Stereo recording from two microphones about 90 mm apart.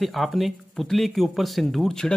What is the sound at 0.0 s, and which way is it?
Speech, centre (ahead or behind).